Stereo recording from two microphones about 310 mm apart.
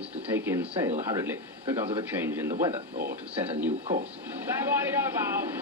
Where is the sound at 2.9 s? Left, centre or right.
Right.